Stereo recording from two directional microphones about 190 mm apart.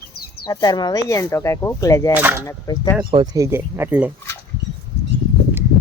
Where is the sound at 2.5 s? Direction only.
25° left (ahead or behind).